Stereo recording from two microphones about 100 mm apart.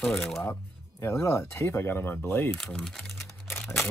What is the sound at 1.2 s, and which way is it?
Speech, 30° left (ahead or behind).